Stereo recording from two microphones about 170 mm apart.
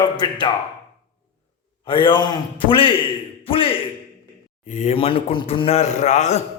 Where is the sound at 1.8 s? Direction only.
30° left (ahead or behind).